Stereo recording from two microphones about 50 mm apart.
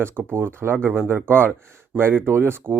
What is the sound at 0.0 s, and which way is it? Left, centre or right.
Speech, right.